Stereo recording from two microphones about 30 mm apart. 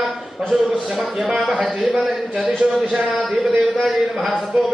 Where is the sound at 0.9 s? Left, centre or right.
Centre.